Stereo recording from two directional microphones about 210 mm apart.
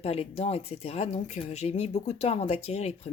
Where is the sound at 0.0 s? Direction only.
30° left (ahead or behind).